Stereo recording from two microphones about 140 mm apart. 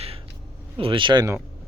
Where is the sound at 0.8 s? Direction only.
35° right (ahead or behind).